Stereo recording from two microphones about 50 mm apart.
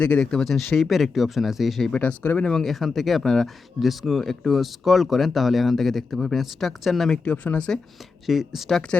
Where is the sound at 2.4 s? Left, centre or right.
Centre.